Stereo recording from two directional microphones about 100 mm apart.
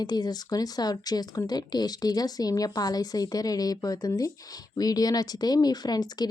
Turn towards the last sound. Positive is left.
turn(degrees=45)  # may be behind; listen again after turning